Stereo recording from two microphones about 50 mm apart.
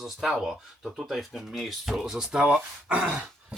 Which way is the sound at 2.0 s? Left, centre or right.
Centre.